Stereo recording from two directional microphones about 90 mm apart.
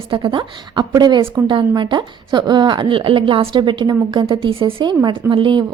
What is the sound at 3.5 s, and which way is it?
A woman's voice, 60° right (ahead or behind).